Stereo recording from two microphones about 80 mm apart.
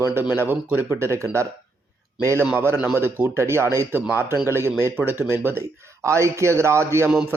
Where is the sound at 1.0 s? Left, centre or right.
Right.